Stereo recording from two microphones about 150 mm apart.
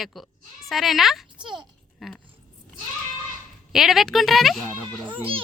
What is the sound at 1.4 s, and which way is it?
Speech, 30° right (ahead or behind).